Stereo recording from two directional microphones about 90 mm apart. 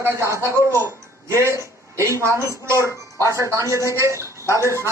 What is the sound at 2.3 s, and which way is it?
Speech, 35° left (ahead or behind).